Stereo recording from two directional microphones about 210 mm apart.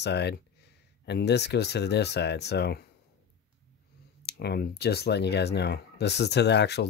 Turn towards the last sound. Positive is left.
turn(degrees=55)  # may be behind; listen again after turning